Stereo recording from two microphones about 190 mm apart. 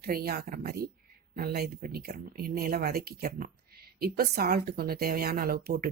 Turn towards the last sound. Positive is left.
turn(degrees=-50)  # may be behind; listen again after turning